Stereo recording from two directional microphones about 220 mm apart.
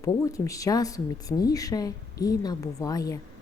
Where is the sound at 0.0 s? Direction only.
15° left (ahead or behind).